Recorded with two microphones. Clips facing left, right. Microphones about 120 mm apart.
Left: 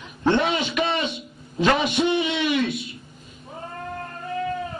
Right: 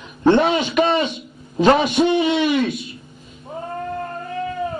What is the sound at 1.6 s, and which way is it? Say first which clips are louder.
A man's voice: right 6 dB; 35° right (ahead or behind).